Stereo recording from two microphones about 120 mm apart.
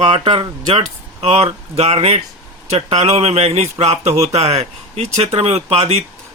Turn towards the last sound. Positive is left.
turn(degrees=-60)  # may be behind; listen again after turning